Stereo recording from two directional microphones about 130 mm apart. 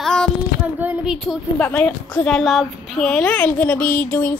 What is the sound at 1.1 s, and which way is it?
A child's voice, centre (ahead or behind).